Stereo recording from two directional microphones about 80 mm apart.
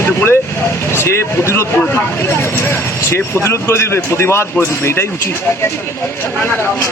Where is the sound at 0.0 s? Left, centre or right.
Left.